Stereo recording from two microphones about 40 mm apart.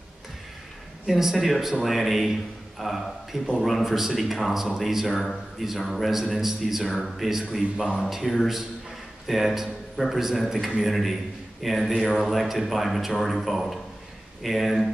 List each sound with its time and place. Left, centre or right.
1.0 s a man's voice: centre